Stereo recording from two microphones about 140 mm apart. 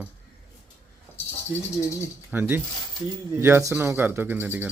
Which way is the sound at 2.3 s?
15° right (ahead or behind).